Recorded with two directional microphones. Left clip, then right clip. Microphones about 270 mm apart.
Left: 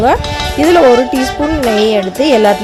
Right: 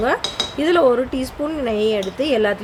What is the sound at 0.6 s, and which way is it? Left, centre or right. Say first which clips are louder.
Speech: left 9 dB; left.